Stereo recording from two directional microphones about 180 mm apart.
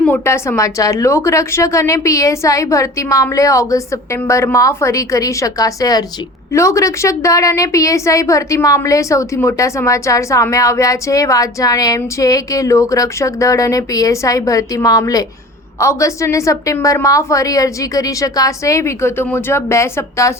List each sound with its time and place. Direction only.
0.0 s a woman's voice: 10° left (ahead or behind)